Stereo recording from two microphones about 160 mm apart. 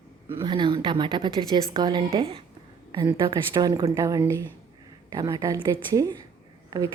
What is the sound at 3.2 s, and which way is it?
A woman's voice, 25° right (ahead or behind).